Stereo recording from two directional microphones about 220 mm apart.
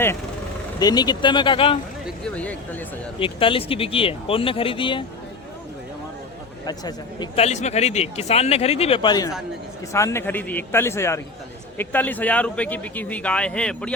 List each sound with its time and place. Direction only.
0.8 s speech: 20° left (ahead or behind)
2.0 s speech: 5° left (ahead or behind)
3.2 s speech: 25° left (ahead or behind)
6.7 s a man's voice: 20° left (ahead or behind)